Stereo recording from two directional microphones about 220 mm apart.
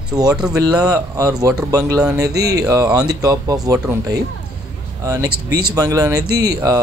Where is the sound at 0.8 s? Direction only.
15° right (ahead or behind).